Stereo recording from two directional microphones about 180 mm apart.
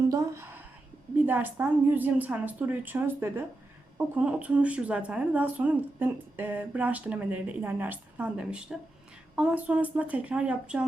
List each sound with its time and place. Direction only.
0.1 s a woman's voice: 15° right (ahead or behind)